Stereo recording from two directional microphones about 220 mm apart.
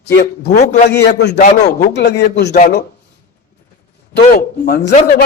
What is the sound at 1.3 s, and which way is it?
Speech, 35° left (ahead or behind).